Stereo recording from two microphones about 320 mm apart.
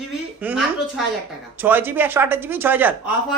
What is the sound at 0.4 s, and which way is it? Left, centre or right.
Speech, centre.